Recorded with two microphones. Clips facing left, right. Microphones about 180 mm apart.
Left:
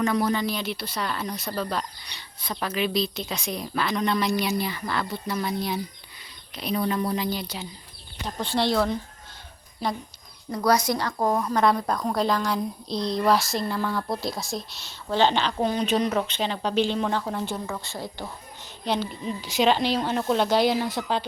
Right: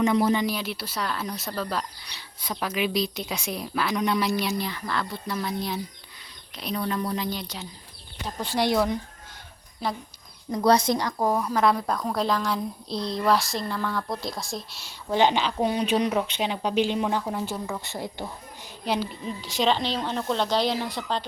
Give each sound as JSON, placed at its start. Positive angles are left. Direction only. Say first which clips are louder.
{"t": 0.0, "sound": "speech", "louder": "right 2 dB", "side_deg": -20}
{"t": 0.4, "sound": "speech", "louder": "even", "side_deg": -5}
{"t": 8.4, "sound": "speech", "louder": "even", "side_deg": -10}
{"t": 9.8, "sound": "speech", "louder": "left 1 dB", "side_deg": -5}
{"t": 10.5, "sound": "speech", "louder": "right 2 dB", "side_deg": -25}
{"t": 10.9, "sound": "speech", "louder": "even", "side_deg": -10}
{"t": 14.8, "sound": "speech", "louder": "even", "side_deg": -10}
{"t": 18.9, "sound": "speech", "louder": "left 1 dB", "side_deg": -5}